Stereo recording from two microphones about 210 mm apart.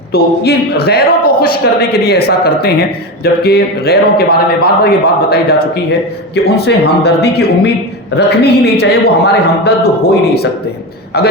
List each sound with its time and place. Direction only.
0.1 s a man's voice: 45° left (ahead or behind)